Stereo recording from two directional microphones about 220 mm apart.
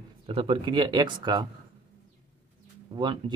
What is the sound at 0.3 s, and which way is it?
Speech, 25° right (ahead or behind).